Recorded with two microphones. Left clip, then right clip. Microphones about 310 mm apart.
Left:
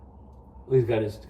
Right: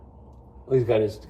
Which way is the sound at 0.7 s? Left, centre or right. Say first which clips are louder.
Right 2 dB; centre.